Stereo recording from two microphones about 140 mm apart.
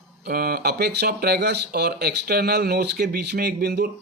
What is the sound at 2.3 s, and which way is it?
Speech, 90° right.